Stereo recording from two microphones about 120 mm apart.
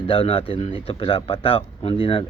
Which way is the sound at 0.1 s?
50° left (ahead or behind).